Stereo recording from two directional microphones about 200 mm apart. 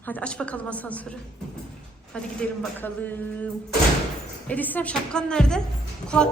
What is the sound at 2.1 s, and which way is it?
A woman's voice, 5° left (ahead or behind).